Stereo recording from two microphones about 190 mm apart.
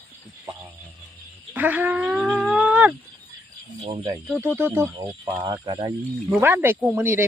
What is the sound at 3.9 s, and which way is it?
Speech, 30° right (ahead or behind).